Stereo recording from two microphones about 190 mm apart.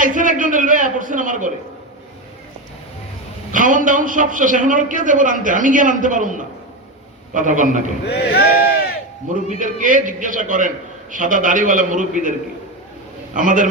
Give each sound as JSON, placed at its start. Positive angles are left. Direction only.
{"t": 0.0, "sound": "a sound", "side_deg": -45}
{"t": 3.5, "sound": "a man's voice", "side_deg": -45}
{"t": 8.0, "sound": "speech", "side_deg": 60}
{"t": 9.3, "sound": "a man's voice", "side_deg": -40}
{"t": 13.3, "sound": "a man's voice", "side_deg": -45}